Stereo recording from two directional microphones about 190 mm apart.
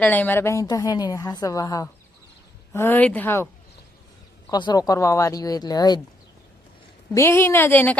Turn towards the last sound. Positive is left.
turn(degrees=10)  # may be behind; listen again after turning